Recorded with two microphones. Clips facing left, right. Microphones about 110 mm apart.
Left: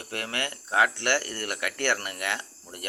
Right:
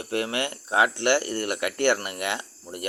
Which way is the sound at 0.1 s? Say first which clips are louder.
Right 6 dB; 20° right (ahead or behind).